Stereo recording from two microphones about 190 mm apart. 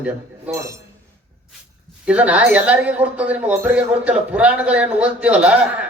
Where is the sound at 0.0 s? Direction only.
10° right (ahead or behind).